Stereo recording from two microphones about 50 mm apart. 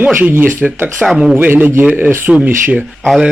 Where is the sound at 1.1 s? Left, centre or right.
Centre.